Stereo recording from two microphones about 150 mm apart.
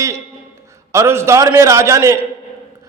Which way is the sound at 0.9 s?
15° right (ahead or behind).